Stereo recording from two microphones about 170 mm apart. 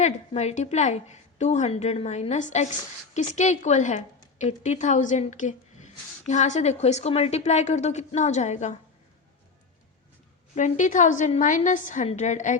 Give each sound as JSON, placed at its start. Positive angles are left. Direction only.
{"t": 0.0, "sound": "a woman's voice", "side_deg": 40}
{"t": 10.5, "sound": "a woman's voice", "side_deg": 45}